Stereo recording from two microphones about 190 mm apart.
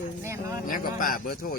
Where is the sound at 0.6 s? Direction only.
45° left (ahead or behind).